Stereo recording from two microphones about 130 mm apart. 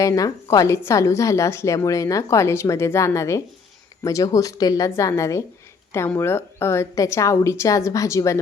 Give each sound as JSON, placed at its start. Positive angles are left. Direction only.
{"t": 0.0, "sound": "a woman's voice", "side_deg": 25}